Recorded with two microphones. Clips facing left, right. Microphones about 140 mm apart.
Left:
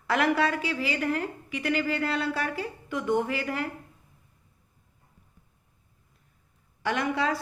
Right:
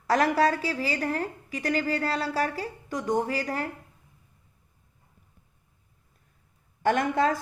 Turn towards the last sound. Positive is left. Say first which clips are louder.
# right 3 dB
turn(degrees=-45)  # may be behind; listen again after turning